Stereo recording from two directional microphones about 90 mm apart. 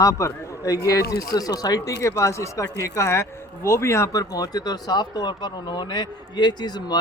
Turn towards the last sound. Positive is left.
turn(degrees=50)  # may be behind; listen again after turning